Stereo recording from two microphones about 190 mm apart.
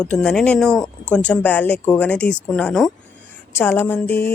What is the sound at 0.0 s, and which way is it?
A woman's voice, 5° left (ahead or behind).